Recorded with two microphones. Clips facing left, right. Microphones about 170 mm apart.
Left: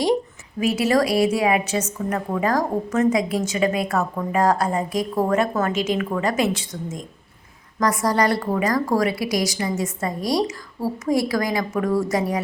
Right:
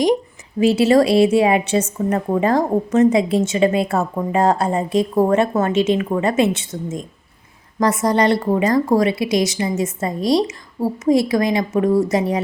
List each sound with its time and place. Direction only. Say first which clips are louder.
0.6 s a woman's voice: right 6 dB; 30° right (ahead or behind)